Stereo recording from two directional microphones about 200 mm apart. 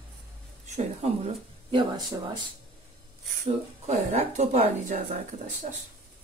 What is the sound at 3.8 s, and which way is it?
Speech, 35° right (ahead or behind).